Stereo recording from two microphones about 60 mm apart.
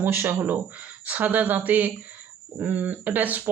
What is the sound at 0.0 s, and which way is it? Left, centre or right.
Speech, right.